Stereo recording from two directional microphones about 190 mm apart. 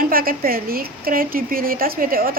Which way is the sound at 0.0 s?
50° right (ahead or behind).